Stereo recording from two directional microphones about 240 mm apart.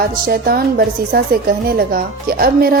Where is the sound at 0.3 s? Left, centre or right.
Right.